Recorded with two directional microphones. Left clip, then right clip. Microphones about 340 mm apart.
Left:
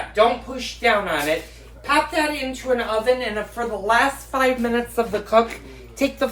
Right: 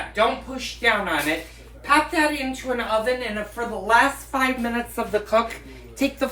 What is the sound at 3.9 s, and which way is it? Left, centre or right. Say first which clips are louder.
Speech: right 1 dB; centre.